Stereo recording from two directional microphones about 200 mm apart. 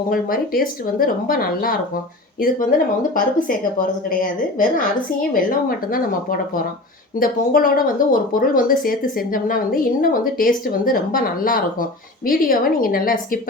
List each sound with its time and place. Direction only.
0.1 s speech: 45° left (ahead or behind)
5.3 s speech: 45° left (ahead or behind)